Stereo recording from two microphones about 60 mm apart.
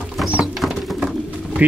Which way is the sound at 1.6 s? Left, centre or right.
Right.